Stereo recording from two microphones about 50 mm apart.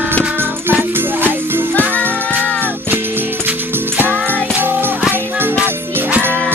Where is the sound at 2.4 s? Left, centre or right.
Left.